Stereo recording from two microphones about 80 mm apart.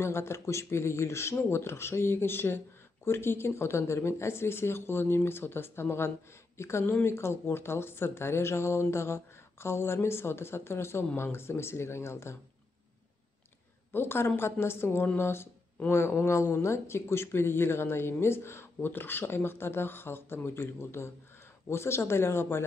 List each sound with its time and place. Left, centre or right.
0.0 s speech: left
13.9 s speech: left